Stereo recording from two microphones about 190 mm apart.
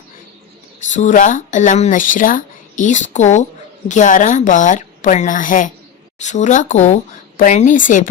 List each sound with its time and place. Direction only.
0.9 s a woman's voice: 40° left (ahead or behind)